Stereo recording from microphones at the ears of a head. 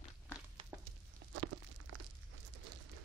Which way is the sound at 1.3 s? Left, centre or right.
Right.